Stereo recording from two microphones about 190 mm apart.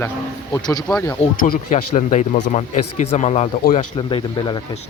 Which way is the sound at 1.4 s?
45° left (ahead or behind).